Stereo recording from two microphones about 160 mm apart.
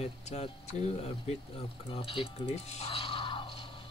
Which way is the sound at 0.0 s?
40° left (ahead or behind).